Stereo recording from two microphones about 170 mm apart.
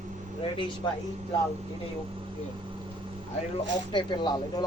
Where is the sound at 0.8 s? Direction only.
25° left (ahead or behind).